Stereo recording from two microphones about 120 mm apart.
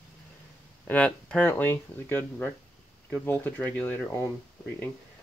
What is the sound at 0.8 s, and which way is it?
Speech, 10° left (ahead or behind).